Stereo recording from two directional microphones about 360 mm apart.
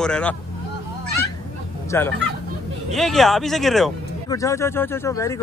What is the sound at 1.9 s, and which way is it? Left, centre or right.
Speech, centre.